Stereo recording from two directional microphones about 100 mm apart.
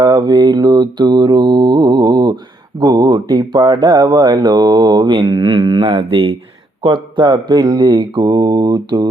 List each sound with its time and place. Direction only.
0.0 s mantra: 45° right (ahead or behind)
2.8 s speech: 45° right (ahead or behind); by 6.3 s 65° right (ahead or behind)
6.8 s speech: 50° right (ahead or behind)